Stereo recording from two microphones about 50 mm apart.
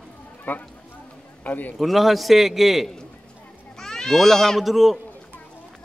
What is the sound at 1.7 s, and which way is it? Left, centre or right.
Speech, centre.